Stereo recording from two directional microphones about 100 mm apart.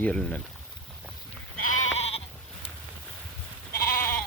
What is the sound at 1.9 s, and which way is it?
Sheep, 90° left.